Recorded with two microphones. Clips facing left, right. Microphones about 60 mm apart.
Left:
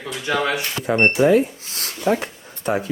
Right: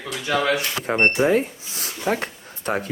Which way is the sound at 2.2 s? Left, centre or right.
Right.